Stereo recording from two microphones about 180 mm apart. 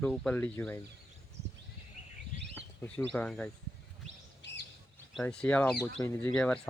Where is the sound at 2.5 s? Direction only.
10° left (ahead or behind).